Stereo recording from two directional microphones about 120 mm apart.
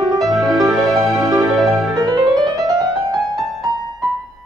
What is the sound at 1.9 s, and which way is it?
Music, 30° right (ahead or behind).